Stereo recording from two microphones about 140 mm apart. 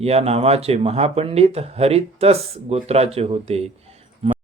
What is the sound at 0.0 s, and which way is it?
Speech, 45° right (ahead or behind).